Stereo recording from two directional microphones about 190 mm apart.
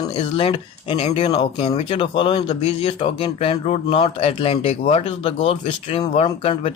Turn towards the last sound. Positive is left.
turn(degrees=30)  # may be behind; listen again after turning